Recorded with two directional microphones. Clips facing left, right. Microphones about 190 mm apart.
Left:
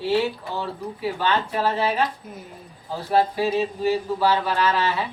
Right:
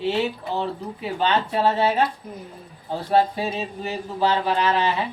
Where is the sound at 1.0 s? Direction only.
20° right (ahead or behind).